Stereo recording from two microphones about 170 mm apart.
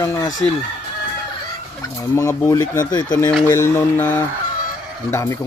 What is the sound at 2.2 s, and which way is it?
Speech, 15° left (ahead or behind).